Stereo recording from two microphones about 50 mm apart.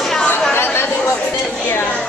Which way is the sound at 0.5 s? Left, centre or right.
Left.